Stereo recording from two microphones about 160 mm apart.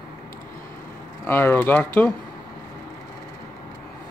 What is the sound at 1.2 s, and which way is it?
Speech, 15° left (ahead or behind).